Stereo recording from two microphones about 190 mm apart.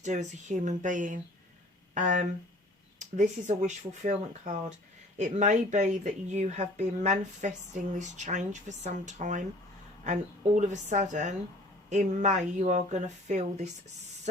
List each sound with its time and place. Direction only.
0.0 s speech: 40° right (ahead or behind)